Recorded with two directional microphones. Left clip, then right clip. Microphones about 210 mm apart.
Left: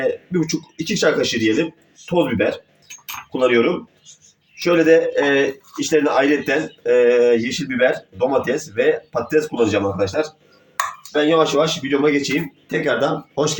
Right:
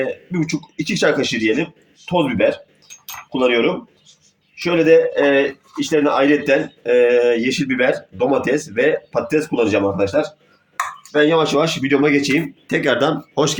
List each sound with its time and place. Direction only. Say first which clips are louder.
0.3 s speech: left 1 dB; 40° right (ahead or behind)